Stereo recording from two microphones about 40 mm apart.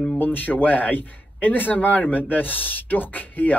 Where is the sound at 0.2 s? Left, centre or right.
Left.